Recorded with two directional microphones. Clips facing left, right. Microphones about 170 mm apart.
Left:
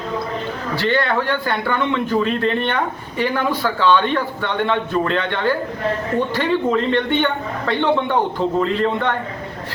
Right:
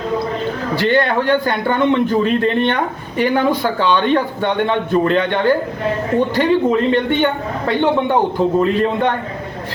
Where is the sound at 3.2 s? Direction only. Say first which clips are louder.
Right 5 dB; 20° right (ahead or behind).